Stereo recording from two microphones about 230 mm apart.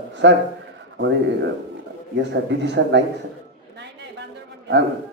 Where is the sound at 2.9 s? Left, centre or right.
Right.